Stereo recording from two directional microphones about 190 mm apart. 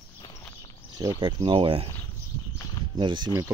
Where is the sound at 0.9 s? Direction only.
25° right (ahead or behind).